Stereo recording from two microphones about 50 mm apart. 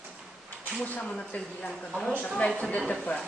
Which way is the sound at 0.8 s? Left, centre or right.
Left.